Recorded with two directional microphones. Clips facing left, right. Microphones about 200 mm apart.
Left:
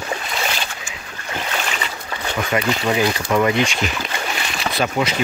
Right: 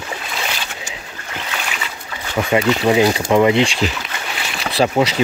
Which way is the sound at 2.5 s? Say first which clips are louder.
Right 6 dB; 25° right (ahead or behind).